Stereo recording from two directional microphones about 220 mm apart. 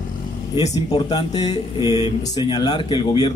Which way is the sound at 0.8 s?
20° left (ahead or behind).